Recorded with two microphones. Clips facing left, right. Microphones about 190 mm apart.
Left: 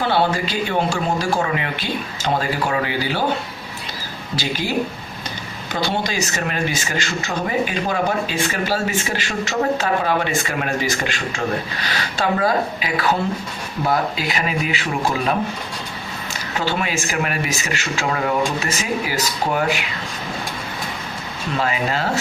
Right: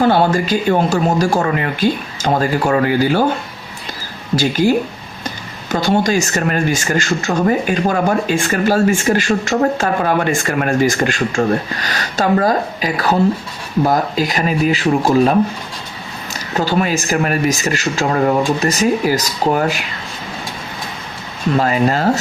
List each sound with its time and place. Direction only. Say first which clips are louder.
0.0 s speech: right 6 dB; 45° right (ahead or behind)
4.4 s speech: right 10 dB; 45° right (ahead or behind)
5.7 s speech: right 8 dB; 45° right (ahead or behind)
16.6 s speech: right 6 dB; 40° right (ahead or behind)
21.5 s speech: right 7 dB; 45° right (ahead or behind)